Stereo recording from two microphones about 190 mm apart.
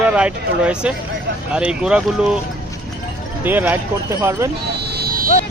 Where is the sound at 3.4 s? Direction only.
10° right (ahead or behind).